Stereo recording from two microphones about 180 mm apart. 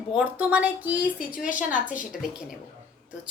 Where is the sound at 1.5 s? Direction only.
45° left (ahead or behind).